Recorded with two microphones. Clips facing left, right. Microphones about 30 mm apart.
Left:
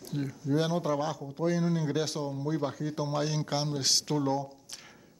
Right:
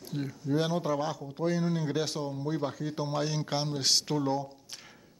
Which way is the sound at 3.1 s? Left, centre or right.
Centre.